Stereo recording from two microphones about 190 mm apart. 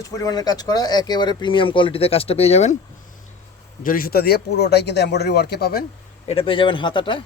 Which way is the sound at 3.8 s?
50° left (ahead or behind).